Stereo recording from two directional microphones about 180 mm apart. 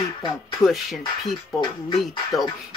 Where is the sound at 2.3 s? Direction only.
Centre (ahead or behind).